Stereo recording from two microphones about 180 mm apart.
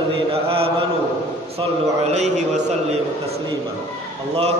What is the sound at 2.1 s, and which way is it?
Chant, 40° right (ahead or behind).